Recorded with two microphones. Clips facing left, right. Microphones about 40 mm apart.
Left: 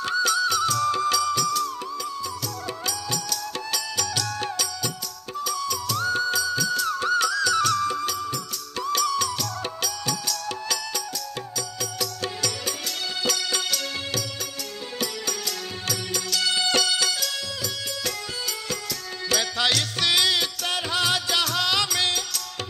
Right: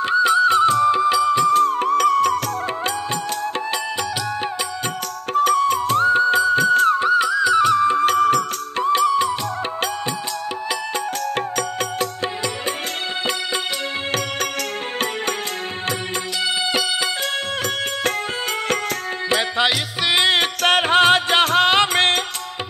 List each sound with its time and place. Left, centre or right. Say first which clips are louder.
0.0 s music: right 8 dB; right
3.1 s music: right 7 dB; right
5.3 s music: right 12 dB; right
7.0 s music: right 6 dB; right
8.0 s music: right 13 dB; right
8.7 s music: right 7 dB; right
11.3 s music: right 10 dB; right
13.2 s music: right 2 dB; right
19.2 s music: right 5 dB; right
20.2 s music: right 6 dB; right